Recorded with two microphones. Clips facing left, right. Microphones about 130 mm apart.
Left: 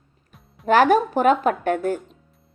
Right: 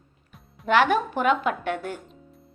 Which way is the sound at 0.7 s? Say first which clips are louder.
Left 5 dB; 40° left (ahead or behind).